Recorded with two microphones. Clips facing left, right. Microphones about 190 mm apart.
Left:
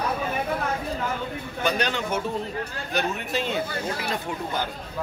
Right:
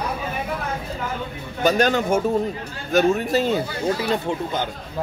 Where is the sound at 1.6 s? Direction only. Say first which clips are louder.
Right 7 dB; 40° right (ahead or behind).